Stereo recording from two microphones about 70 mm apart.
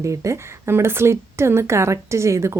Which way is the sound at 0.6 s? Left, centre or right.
Right.